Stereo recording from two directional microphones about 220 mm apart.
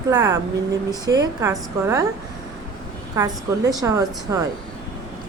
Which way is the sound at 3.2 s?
15° right (ahead or behind).